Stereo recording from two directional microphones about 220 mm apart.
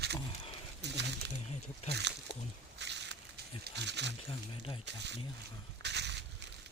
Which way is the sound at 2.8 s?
50° right (ahead or behind).